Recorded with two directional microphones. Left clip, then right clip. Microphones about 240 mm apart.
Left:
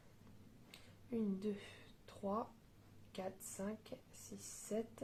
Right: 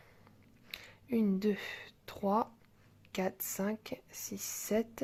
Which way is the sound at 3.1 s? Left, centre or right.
Right.